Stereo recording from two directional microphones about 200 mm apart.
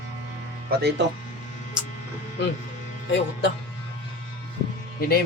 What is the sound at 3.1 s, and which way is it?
Speech, 60° left (ahead or behind).